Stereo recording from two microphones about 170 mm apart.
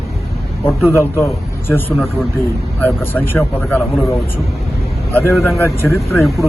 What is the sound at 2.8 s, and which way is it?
Speech, 10° left (ahead or behind).